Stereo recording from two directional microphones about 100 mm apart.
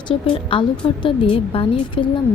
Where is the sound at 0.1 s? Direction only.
60° left (ahead or behind).